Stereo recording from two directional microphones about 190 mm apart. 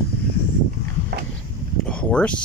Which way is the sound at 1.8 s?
5° left (ahead or behind).